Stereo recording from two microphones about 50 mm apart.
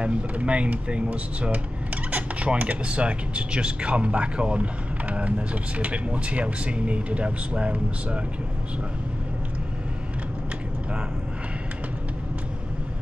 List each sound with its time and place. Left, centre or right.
0.0 s speech: right